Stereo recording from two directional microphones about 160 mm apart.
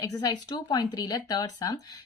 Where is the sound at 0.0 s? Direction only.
25° left (ahead or behind).